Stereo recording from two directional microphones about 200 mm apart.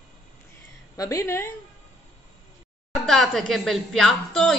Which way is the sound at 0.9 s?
15° left (ahead or behind).